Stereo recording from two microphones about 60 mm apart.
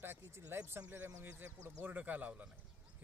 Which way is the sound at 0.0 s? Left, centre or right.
Right.